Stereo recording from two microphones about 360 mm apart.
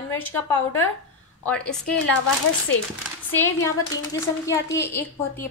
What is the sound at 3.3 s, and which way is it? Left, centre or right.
A woman's voice, centre.